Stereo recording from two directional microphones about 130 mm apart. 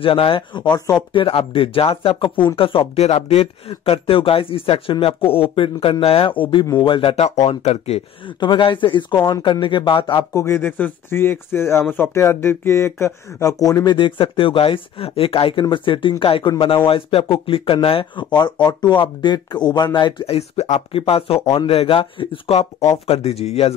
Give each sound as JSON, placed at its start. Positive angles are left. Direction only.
{"t": 0.0, "sound": "speech", "side_deg": 45}
{"t": 8.4, "sound": "speech", "side_deg": 35}
{"t": 10.3, "sound": "speech", "side_deg": 20}
{"t": 13.9, "sound": "speech", "side_deg": 40}
{"t": 20.2, "sound": "speech", "side_deg": 55}
{"t": 20.9, "sound": "speech", "side_deg": 45}